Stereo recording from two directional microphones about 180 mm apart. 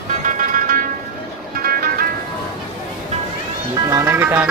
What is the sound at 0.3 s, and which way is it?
Music, 45° right (ahead or behind).